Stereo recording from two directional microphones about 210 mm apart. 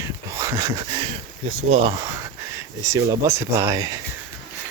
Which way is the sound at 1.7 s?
30° right (ahead or behind).